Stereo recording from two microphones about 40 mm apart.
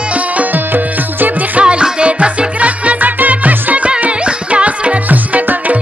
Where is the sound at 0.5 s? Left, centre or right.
Right.